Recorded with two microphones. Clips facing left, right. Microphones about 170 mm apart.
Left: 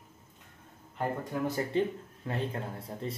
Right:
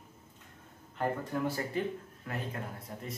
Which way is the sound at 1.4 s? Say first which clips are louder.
Left 6 dB; 20° left (ahead or behind).